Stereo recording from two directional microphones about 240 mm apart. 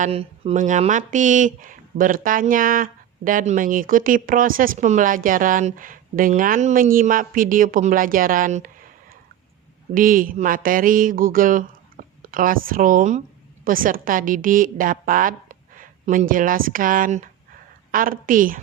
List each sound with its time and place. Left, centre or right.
0.0 s speech: right